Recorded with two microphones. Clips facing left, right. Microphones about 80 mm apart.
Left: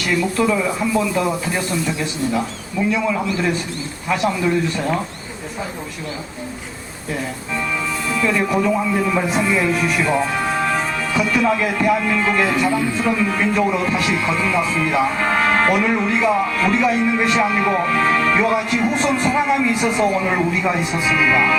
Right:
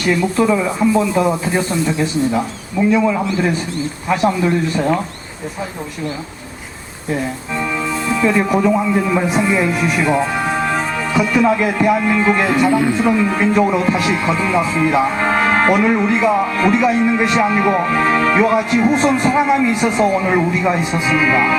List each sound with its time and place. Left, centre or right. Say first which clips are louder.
0.2 s speech: right 3 dB; centre
7.5 s speech: right 2 dB; centre
12.5 s speech: right 4 dB; centre
13.0 s speech: right 4 dB; centre
19.0 s speech: right 4 dB; centre
19.7 s speech: right 3 dB; centre